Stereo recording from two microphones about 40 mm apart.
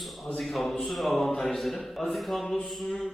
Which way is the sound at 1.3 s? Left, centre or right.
Centre.